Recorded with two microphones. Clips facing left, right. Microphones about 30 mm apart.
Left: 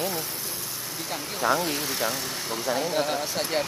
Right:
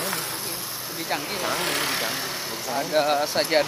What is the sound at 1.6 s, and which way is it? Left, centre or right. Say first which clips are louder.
Speech: right 2 dB; right.